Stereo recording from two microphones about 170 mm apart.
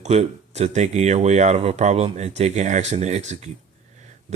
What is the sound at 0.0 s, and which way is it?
Speech, 40° right (ahead or behind).